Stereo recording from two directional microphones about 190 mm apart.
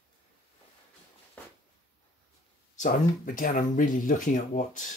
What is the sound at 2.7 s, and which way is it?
Speech, 45° left (ahead or behind).